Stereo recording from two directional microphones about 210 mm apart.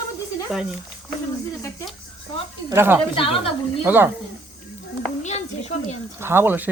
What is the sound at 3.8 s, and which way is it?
Speech, 10° right (ahead or behind).